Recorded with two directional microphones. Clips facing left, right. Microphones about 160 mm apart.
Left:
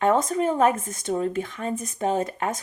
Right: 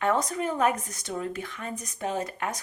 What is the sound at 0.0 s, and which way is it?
Speech, 25° left (ahead or behind).